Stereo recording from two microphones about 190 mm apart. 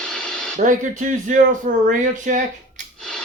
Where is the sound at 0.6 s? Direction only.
45° right (ahead or behind).